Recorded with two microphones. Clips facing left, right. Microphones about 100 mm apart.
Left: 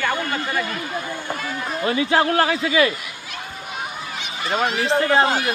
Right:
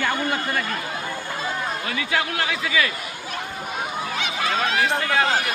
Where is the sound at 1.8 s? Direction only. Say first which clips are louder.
Left 10 dB; 35° left (ahead or behind).